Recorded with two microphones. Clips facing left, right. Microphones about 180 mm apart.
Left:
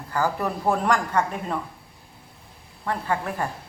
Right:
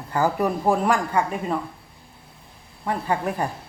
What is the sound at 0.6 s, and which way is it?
Speech, 10° right (ahead or behind).